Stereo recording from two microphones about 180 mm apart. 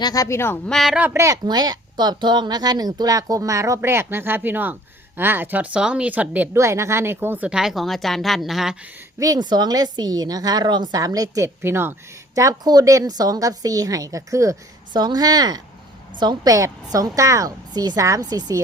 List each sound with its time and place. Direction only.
0.0 s speech: 20° left (ahead or behind)
0.7 s a woman's voice: centre (ahead or behind)
9.1 s a woman's voice: 20° right (ahead or behind)